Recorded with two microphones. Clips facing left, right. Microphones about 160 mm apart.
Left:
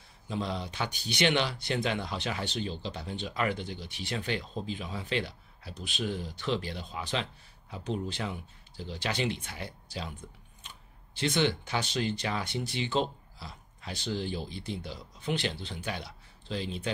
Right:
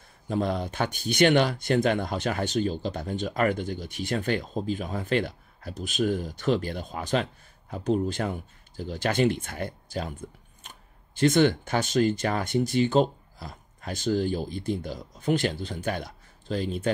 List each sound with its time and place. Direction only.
0.3 s speech: 50° right (ahead or behind)